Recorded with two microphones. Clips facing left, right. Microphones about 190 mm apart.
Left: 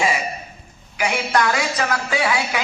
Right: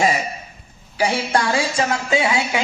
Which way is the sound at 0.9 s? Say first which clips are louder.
Right 1 dB; 30° right (ahead or behind).